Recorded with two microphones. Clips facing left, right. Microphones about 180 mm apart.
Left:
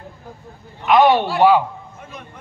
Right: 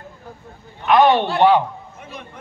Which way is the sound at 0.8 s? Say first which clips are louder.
Even; 10° left (ahead or behind).